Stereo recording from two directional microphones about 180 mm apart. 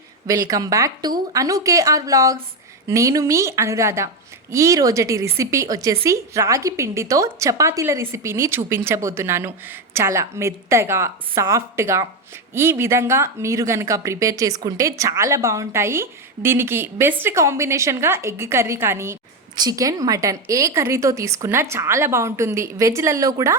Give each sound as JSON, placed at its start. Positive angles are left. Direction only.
{"t": 0.3, "sound": "a woman's voice", "side_deg": -20}